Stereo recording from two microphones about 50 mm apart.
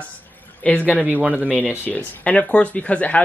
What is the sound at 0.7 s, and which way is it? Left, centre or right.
Speech, left.